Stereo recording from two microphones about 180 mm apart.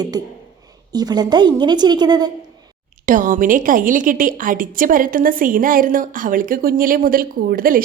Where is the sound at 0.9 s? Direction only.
20° right (ahead or behind).